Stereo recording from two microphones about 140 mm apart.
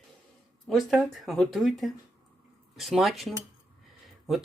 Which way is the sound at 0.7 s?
Centre (ahead or behind).